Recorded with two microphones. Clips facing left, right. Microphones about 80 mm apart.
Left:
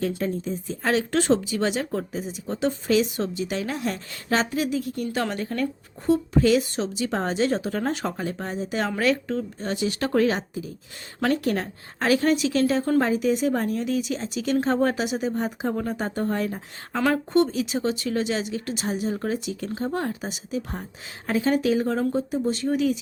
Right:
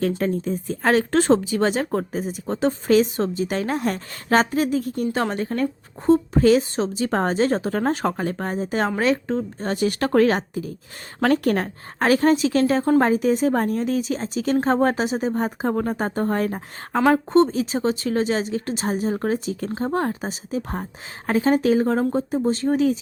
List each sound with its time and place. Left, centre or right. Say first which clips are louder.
0.2 s a woman's voice: right 4 dB; right
9.0 s a woman's voice: right 2 dB; right
17.1 s a woman's voice: right 4 dB; right